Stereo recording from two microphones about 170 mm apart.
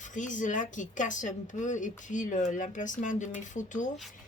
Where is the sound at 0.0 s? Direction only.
50° left (ahead or behind).